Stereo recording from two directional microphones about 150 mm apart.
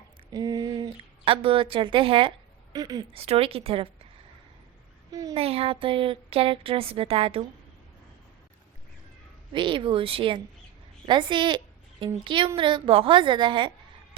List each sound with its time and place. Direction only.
0.3 s speech: 25° right (ahead or behind)
2.7 s speech: 25° right (ahead or behind)
3.1 s speech: 40° right (ahead or behind)
5.3 s speech: 40° right (ahead or behind)
9.5 s a woman's voice: 35° right (ahead or behind)